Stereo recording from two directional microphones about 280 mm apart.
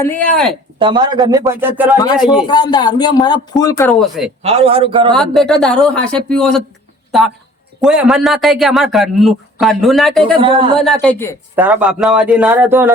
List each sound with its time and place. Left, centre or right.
0.0 s a man's voice: centre
0.8 s a man's voice: centre
2.5 s speech: centre
4.4 s a man's voice: right
5.1 s a man's voice: centre
7.8 s a man's voice: centre
11.5 s a man's voice: centre